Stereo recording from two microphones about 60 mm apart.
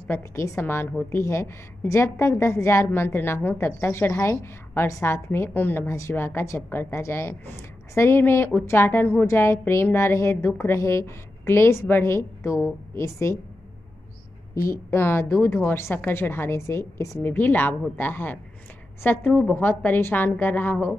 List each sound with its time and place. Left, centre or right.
0.6 s a woman's voice: left
9.2 s a woman's voice: left
14.5 s a woman's voice: left
17.2 s a woman's voice: left
19.5 s a woman's voice: left